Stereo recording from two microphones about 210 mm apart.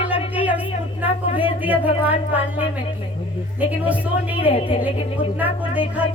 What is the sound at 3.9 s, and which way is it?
Speech, 5° right (ahead or behind).